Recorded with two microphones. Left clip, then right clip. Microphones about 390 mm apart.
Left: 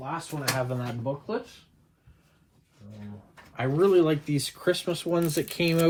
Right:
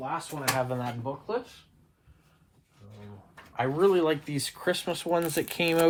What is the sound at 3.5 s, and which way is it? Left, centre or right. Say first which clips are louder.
Cutlery: left 2 dB; centre.